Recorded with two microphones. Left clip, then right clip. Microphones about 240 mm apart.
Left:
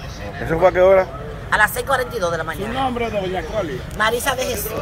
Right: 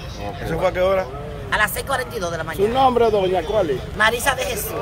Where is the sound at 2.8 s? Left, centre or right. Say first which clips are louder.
Right 6 dB; right.